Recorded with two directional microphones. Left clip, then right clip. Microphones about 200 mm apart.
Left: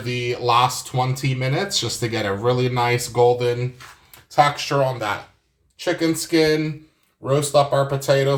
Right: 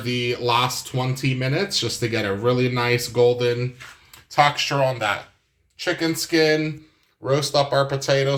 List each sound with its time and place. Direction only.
0.0 s speech: centre (ahead or behind)
7.5 s speech: 15° right (ahead or behind)